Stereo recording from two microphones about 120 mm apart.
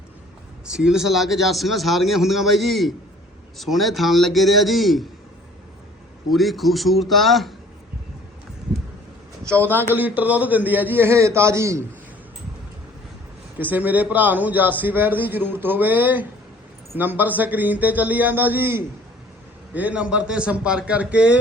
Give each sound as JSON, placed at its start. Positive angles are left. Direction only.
{"t": 0.7, "sound": "a man's voice", "side_deg": -5}
{"t": 6.3, "sound": "a man's voice", "side_deg": 0}
{"t": 9.5, "sound": "a man's voice", "side_deg": -15}
{"t": 13.6, "sound": "a man's voice", "side_deg": -15}